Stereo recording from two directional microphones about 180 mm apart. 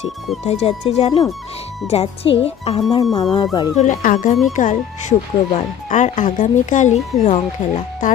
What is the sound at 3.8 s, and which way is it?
Speech, 45° left (ahead or behind).